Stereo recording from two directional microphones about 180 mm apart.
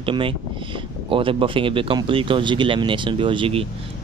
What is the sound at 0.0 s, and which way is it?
Speech, 30° right (ahead or behind).